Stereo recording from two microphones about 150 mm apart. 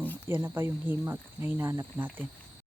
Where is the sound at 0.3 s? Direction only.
15° right (ahead or behind).